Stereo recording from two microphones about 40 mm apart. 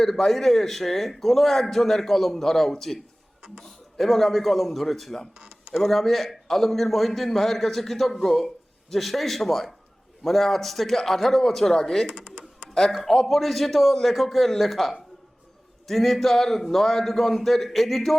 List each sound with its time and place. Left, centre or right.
0.0 s a man's voice: centre
5.4 s a sound: centre
5.7 s a man's voice: centre
12.0 s computer keyboard: centre
12.9 s a man's voice: centre